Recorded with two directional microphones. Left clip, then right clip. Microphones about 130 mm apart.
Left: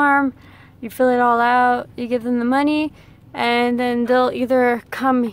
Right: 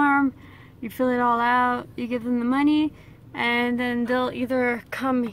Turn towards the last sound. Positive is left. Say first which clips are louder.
# left 7 dB
turn(degrees=25)  # may be behind; listen again after turning